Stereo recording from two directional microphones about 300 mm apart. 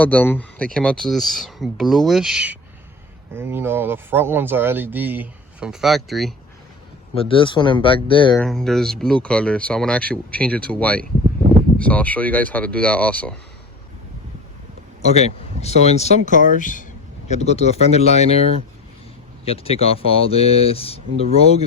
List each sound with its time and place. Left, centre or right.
0.0 s speech: centre
7.1 s speech: centre
8.4 s speech: centre
15.0 s speech: left